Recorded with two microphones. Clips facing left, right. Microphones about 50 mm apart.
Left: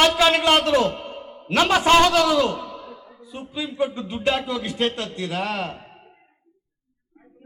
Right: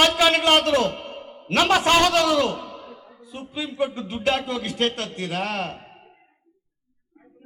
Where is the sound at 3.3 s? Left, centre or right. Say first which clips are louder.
Left 1 dB; centre.